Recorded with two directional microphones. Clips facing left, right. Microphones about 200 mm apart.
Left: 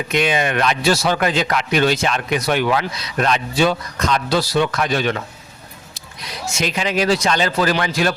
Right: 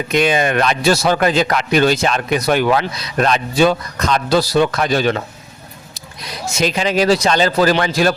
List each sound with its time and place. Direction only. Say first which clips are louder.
0.1 s speech: right 4 dB; 40° right (ahead or behind)
6.6 s speech: right 4 dB; 35° right (ahead or behind)